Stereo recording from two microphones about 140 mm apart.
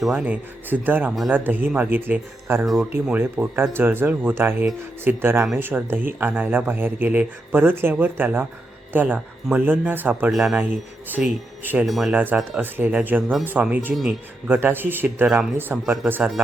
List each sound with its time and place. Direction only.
0.0 s a man's voice: 5° right (ahead or behind)
12.5 s speech: 15° right (ahead or behind)